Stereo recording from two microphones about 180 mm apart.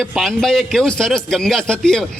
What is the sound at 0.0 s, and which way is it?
A man's voice, centre (ahead or behind).